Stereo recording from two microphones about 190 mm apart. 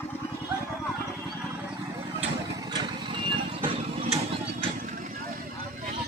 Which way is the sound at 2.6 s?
20° right (ahead or behind).